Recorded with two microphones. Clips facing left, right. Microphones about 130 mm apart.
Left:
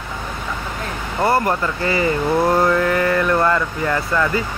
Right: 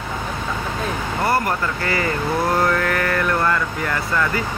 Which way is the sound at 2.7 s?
20° left (ahead or behind).